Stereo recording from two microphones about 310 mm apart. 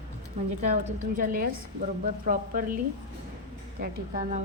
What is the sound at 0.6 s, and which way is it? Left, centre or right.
A woman's voice, right.